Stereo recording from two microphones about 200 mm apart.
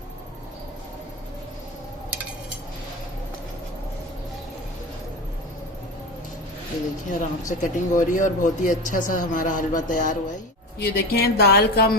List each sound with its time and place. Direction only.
7.2 s speech: 40° left (ahead or behind)
10.8 s a woman's voice: 55° left (ahead or behind)